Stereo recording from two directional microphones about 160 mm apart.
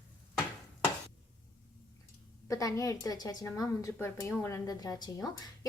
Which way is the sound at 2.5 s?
20° left (ahead or behind).